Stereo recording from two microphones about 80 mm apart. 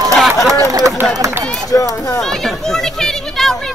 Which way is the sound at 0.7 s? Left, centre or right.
Right.